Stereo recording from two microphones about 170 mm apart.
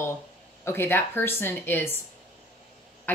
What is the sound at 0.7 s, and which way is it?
Speech, 15° left (ahead or behind).